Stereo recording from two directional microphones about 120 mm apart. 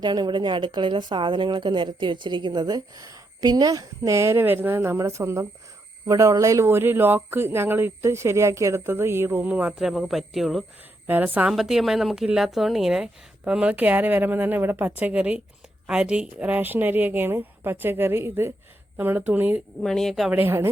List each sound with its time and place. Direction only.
0.0 s a woman's voice: 35° right (ahead or behind); by 10.7 s centre (ahead or behind)
11.0 s a woman's voice: 15° right (ahead or behind)
19.8 s a woman's voice: 5° left (ahead or behind)
20.3 s a woman's voice: 20° right (ahead or behind)